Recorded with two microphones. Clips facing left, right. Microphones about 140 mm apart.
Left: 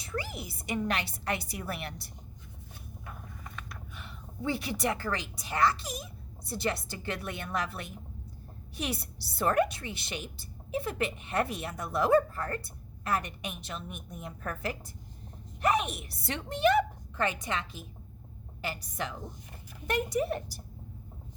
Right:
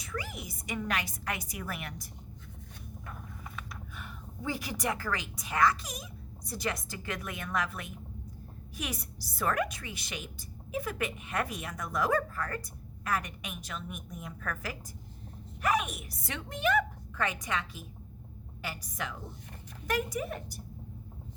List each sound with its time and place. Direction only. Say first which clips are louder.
0.0 s a woman's voice: left 2 dB; 30° left (ahead or behind)
3.1 s a sound: even; centre (ahead or behind)
4.4 s a woman's voice: left 3 dB; 30° left (ahead or behind)
20.1 s a woman's voice: left 6 dB; 35° left (ahead or behind)